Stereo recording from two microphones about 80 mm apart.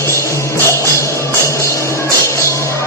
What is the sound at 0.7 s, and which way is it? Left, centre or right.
Music, left.